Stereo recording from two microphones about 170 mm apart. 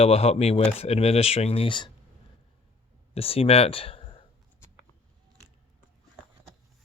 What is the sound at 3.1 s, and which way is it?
Speech, 35° left (ahead or behind).